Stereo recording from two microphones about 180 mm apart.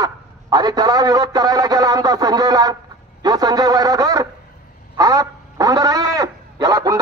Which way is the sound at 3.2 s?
20° right (ahead or behind).